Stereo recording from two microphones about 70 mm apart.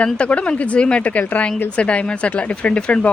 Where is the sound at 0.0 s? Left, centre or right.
Centre.